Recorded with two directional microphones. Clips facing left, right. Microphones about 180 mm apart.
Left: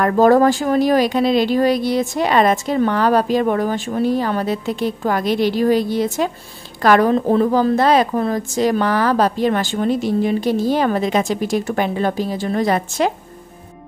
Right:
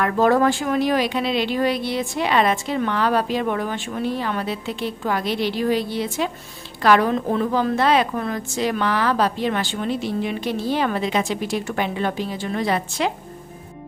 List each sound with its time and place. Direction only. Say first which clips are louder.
0.0 s a woman's voice: left 5 dB; 40° left (ahead or behind)